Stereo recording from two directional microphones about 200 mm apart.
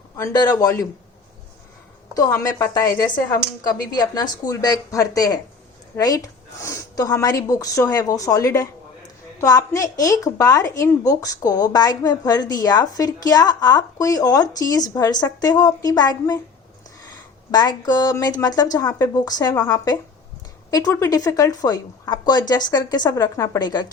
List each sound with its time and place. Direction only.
0.2 s speech: 15° left (ahead or behind)
2.1 s speech: 15° left (ahead or behind)
17.5 s speech: 20° left (ahead or behind)